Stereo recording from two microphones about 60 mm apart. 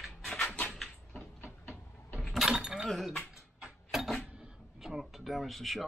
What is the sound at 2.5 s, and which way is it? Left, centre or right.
Chink, centre.